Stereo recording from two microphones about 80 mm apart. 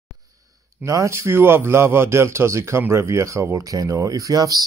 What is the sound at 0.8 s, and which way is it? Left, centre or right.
A man's voice, right.